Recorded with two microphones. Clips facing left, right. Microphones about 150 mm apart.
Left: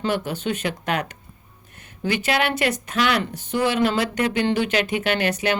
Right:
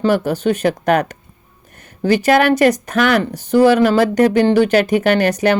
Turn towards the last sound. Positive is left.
turn(degrees=-40)  # may be behind; listen again after turning